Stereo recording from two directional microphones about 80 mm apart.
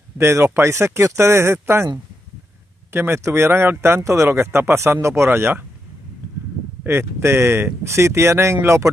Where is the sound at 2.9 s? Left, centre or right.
Right.